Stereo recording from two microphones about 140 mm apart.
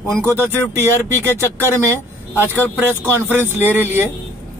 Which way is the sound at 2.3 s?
15° left (ahead or behind).